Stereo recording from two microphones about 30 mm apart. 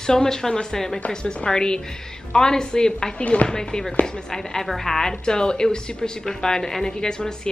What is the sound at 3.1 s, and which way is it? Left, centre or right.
Speech, left.